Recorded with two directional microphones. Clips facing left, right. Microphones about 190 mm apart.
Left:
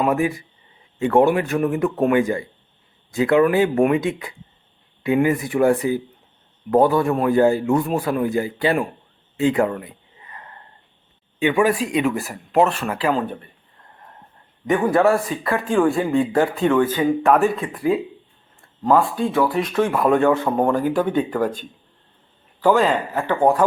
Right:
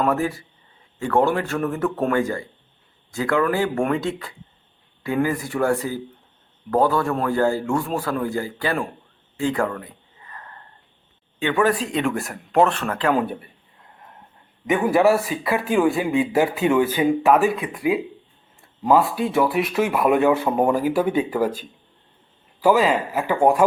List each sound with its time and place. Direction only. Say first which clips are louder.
0.0 s a man's voice: left 2 dB; 15° left (ahead or behind)
9.4 s a sound: left 4 dB; 20° left (ahead or behind)
11.3 s speech: left 2 dB; 15° left (ahead or behind)
13.1 s speech: right 2 dB; 10° right (ahead or behind)
14.7 s speech: even; centre (ahead or behind)
18.8 s speech: even; 10° right (ahead or behind)